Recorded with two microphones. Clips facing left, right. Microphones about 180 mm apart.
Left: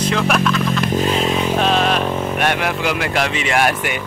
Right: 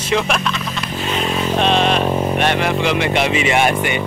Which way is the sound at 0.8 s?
45° left (ahead or behind).